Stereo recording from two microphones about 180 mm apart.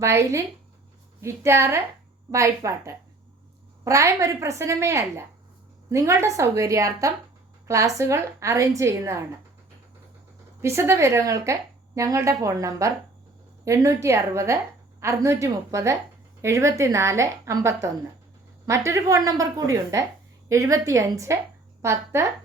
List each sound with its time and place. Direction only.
0.0 s a woman's voice: 15° right (ahead or behind)
10.6 s a woman's voice: 15° right (ahead or behind)